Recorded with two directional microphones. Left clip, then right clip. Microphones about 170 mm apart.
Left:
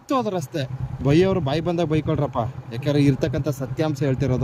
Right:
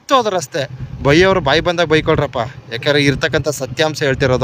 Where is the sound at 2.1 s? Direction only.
35° right (ahead or behind).